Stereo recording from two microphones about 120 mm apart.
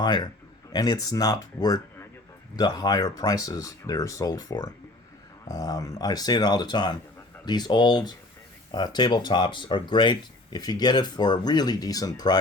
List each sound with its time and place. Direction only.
0.0 s a man's voice: 40° left (ahead or behind)